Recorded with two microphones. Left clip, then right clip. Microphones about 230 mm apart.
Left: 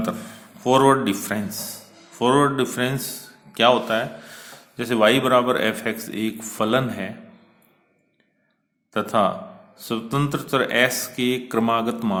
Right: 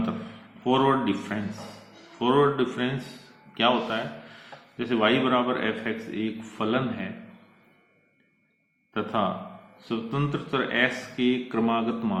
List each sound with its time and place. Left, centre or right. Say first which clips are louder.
0.6 s a man's voice: left 6 dB; left
8.9 s a man's voice: left 7 dB; left